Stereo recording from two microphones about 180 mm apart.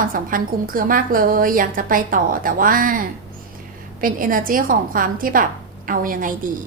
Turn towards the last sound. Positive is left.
turn(degrees=-50)  # may be behind; listen again after turning